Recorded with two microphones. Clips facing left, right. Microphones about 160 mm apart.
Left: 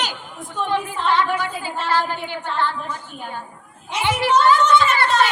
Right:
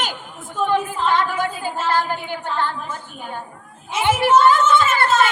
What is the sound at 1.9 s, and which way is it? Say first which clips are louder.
Female singing: left 2 dB; 45° right (ahead or behind).